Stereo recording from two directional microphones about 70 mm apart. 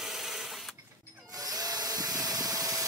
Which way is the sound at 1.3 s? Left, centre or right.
Right.